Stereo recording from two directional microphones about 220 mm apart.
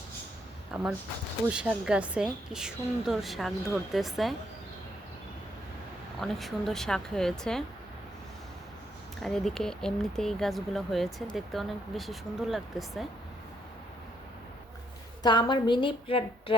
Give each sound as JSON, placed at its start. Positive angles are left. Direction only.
{"t": 0.7, "sound": "a woman's voice", "side_deg": -5}
{"t": 6.1, "sound": "a woman's voice", "side_deg": 0}
{"t": 9.2, "sound": "a woman's voice", "side_deg": 0}
{"t": 15.2, "sound": "a woman's voice", "side_deg": 20}